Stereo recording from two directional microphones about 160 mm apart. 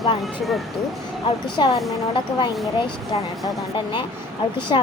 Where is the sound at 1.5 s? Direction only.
30° left (ahead or behind).